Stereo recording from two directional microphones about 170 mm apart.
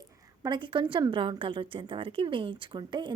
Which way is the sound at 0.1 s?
20° right (ahead or behind).